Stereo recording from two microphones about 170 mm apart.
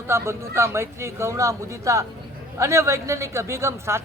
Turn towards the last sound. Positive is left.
turn(degrees=-15)  # may be behind; listen again after turning